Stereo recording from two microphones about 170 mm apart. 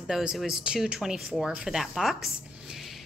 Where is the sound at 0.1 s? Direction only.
5° right (ahead or behind).